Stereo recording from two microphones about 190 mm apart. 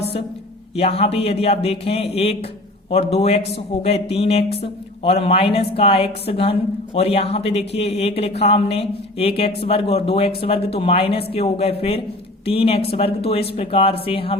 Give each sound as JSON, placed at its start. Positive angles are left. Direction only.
{"t": 0.8, "sound": "a woman's voice", "side_deg": 35}